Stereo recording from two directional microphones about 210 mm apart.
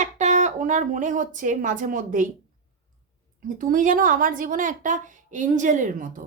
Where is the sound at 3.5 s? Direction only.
40° right (ahead or behind).